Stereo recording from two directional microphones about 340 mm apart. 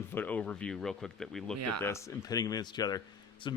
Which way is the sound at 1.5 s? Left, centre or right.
Right.